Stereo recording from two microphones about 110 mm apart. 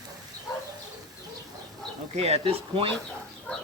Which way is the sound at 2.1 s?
70° right (ahead or behind).